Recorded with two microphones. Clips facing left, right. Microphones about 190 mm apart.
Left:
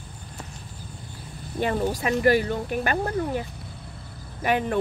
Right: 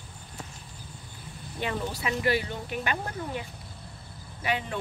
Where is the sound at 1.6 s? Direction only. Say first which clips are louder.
Left 7 dB; 45° left (ahead or behind).